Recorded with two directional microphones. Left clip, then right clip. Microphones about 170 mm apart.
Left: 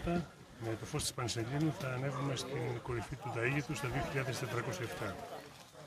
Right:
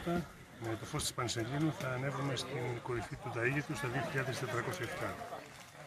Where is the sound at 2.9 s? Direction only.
45° left (ahead or behind).